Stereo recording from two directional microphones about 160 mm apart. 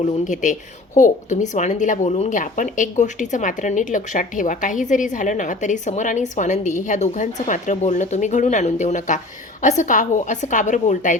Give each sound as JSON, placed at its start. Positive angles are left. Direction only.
{"t": 0.0, "sound": "a woman's voice", "side_deg": 50}